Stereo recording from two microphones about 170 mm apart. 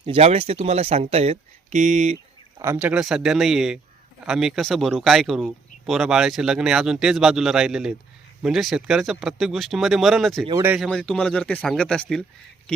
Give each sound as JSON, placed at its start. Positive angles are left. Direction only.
{"t": 0.0, "sound": "speech", "side_deg": -35}
{"t": 2.6, "sound": "speech", "side_deg": -10}